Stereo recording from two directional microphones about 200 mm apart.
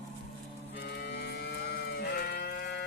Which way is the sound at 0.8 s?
55° left (ahead or behind).